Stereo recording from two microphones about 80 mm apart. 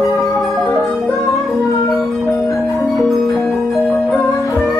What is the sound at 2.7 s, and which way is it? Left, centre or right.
Marimba, centre.